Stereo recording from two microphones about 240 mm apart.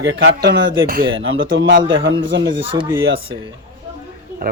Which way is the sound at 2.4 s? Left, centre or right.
Centre.